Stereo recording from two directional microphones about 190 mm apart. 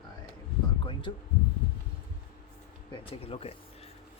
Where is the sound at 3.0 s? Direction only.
30° left (ahead or behind).